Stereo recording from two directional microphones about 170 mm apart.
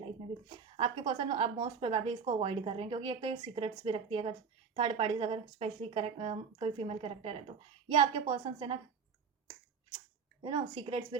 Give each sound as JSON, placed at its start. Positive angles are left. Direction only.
{"t": 0.0, "sound": "a woman's voice", "side_deg": -30}
{"t": 10.4, "sound": "speech", "side_deg": -30}